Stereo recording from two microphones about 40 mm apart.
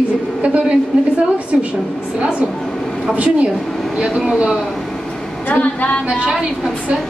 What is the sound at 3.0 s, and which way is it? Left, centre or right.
Speech, right.